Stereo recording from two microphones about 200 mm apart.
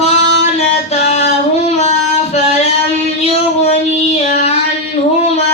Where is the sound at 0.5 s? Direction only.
35° left (ahead or behind).